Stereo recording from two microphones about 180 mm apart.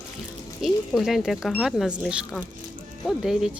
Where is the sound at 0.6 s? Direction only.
Centre (ahead or behind).